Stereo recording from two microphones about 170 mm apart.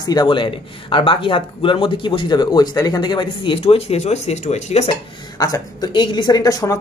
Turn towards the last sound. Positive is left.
turn(degrees=20)  # may be behind; listen again after turning